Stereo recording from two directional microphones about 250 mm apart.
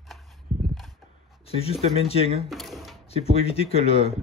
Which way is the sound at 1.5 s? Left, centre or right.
Left.